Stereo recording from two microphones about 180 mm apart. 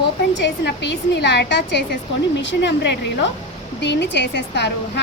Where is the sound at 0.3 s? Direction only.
80° left.